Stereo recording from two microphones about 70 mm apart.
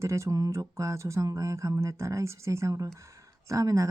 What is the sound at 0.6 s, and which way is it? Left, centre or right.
Speech, right.